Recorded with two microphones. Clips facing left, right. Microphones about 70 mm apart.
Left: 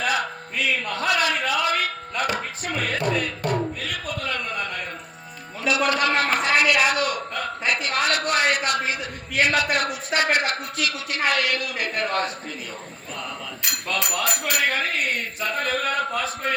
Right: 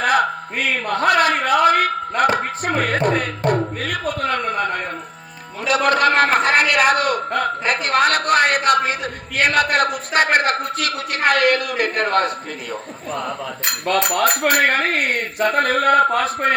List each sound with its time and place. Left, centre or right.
0.0 s a man's voice: right